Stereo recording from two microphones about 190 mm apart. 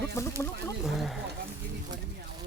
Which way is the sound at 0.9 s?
Centre (ahead or behind).